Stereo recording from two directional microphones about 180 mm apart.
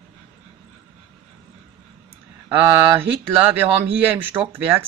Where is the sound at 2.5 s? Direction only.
15° right (ahead or behind).